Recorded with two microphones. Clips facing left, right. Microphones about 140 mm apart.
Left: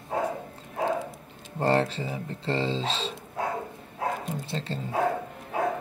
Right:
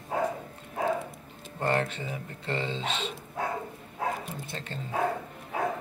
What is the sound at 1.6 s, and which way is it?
Speech, 30° left (ahead or behind).